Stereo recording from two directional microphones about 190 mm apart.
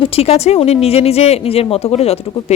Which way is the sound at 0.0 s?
30° left (ahead or behind).